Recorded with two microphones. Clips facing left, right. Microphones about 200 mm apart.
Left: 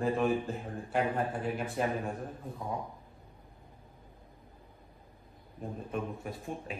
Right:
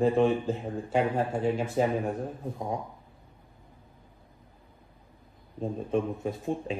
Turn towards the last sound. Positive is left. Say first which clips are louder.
# right 8 dB
turn(degrees=-25)  # may be behind; listen again after turning